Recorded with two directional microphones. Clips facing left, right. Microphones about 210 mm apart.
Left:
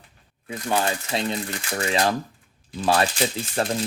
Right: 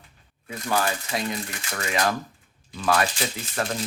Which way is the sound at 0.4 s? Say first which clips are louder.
Left 1 dB; 25° left (ahead or behind).